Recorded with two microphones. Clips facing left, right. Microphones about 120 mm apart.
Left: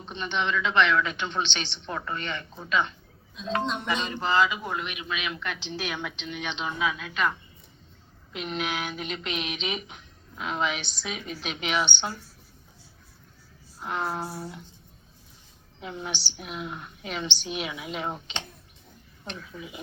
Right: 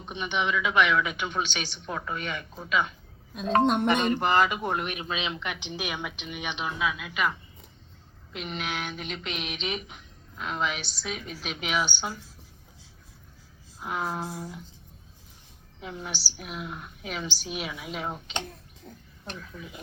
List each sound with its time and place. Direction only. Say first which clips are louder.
0.0 s a woman's voice: even; 15° right (ahead or behind)
3.3 s speech: right 6 dB; 55° right (ahead or behind); by 12.2 s 5° right (ahead or behind)
13.8 s speech: left 1 dB; centre (ahead or behind)
15.8 s speech: left 2 dB; centre (ahead or behind)
19.5 s speech: left 2 dB; 5° left (ahead or behind)